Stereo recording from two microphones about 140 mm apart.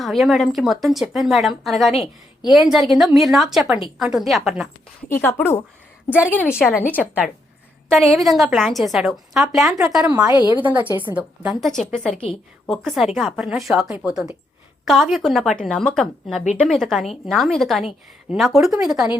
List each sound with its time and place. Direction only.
0.0 s a woman's voice: centre (ahead or behind)
5.0 s a woman's voice: 15° left (ahead or behind)
7.9 s a woman's voice: centre (ahead or behind)